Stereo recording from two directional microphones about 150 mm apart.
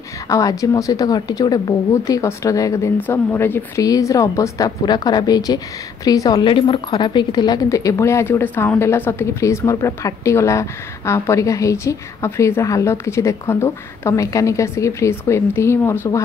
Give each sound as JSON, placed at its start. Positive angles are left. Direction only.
{"t": 0.3, "sound": "a woman's voice", "side_deg": 20}